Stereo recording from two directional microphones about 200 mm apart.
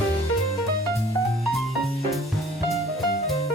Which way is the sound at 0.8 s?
15° left (ahead or behind).